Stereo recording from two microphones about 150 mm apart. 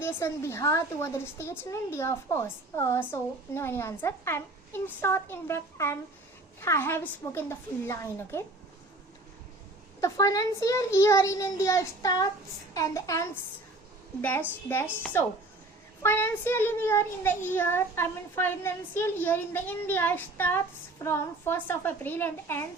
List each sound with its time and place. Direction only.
0.0 s a woman's voice: 15° left (ahead or behind)
10.0 s a child's voice: 20° left (ahead or behind)